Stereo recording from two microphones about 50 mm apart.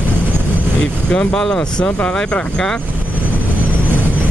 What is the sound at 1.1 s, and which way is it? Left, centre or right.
Speech, left.